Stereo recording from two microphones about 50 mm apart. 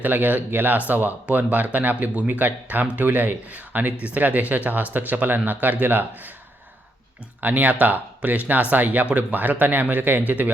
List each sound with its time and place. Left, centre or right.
0.0 s speech: right
7.4 s speech: right